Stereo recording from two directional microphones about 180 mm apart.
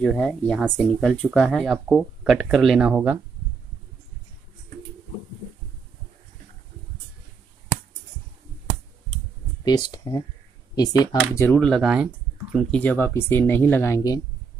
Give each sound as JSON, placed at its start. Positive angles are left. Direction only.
{"t": 0.0, "sound": "speech", "side_deg": 0}
{"t": 9.7, "sound": "speech", "side_deg": 25}
{"t": 10.7, "sound": "a sound", "side_deg": 20}
{"t": 11.3, "sound": "speech", "side_deg": 10}
{"t": 12.5, "sound": "speech", "side_deg": 5}